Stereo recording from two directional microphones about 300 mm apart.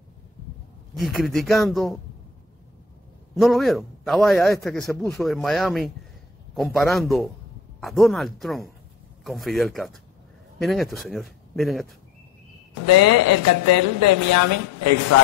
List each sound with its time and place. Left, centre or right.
0.9 s a man's voice: centre
3.3 s a man's voice: centre
12.8 s speech: right